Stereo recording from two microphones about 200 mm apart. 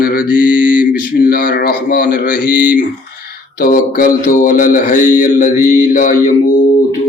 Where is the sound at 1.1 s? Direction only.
45° left (ahead or behind).